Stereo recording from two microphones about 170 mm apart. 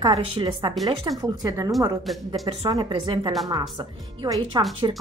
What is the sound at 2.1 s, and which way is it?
Speech, centre (ahead or behind).